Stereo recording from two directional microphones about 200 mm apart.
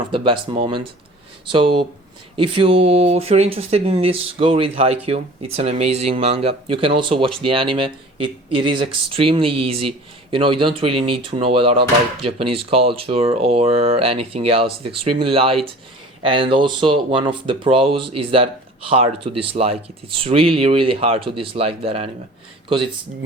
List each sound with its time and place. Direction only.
0.1 s speech: 25° right (ahead or behind)